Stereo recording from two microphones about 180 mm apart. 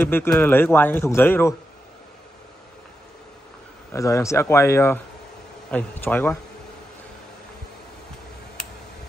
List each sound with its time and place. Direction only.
0.1 s a man's voice: 10° left (ahead or behind)
3.9 s a man's voice: 15° left (ahead or behind)